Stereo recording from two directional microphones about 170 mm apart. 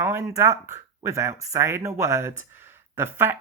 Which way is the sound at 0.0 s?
15° right (ahead or behind).